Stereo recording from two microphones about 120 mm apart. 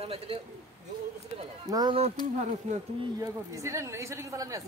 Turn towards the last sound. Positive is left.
turn(degrees=-25)  # may be behind; listen again after turning